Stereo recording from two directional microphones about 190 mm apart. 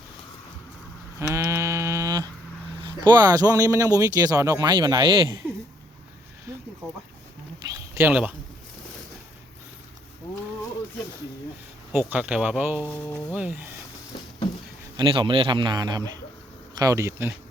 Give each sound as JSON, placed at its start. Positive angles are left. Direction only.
{"t": 1.3, "sound": "a sound", "side_deg": -15}
{"t": 2.8, "sound": "speech", "side_deg": -25}
{"t": 7.7, "sound": "a sound", "side_deg": -10}
{"t": 11.9, "sound": "speech", "side_deg": -10}
{"t": 12.9, "sound": "speech", "side_deg": 10}
{"t": 13.3, "sound": "speech", "side_deg": -5}
{"t": 14.9, "sound": "speech", "side_deg": -25}